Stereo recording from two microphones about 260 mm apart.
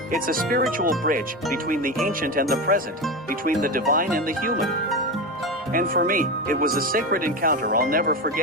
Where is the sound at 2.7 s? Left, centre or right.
Right.